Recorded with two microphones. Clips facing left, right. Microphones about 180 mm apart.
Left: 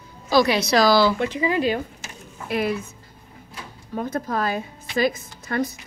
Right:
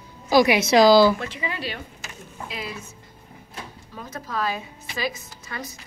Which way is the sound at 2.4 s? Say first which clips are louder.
Left 11 dB; 60° left (ahead or behind).